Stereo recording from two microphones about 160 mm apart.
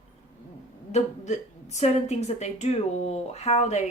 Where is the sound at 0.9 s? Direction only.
45° left (ahead or behind).